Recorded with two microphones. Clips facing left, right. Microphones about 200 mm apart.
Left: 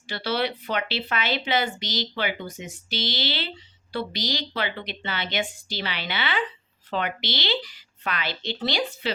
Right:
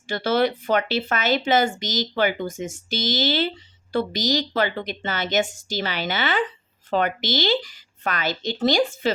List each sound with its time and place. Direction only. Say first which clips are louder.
0.1 s a woman's voice: right 6 dB; 50° right (ahead or behind)